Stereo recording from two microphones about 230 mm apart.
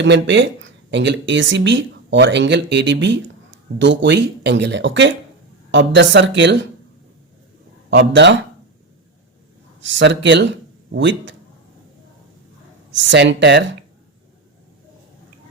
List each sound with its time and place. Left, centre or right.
0.0 s speech: right
7.9 s speech: right
9.8 s speech: right
13.0 s speech: right